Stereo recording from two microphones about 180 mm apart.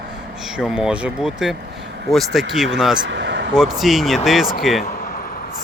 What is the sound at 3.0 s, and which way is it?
Speech, 85° right.